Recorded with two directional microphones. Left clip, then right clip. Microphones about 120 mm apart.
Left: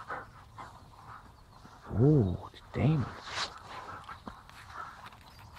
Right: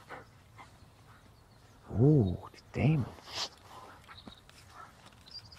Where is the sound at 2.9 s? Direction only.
60° right (ahead or behind).